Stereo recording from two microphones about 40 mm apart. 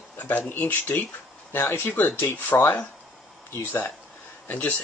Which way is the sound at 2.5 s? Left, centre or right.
Left.